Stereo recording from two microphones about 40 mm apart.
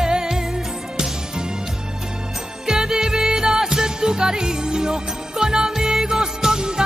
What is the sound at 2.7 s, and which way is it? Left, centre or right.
Music, centre.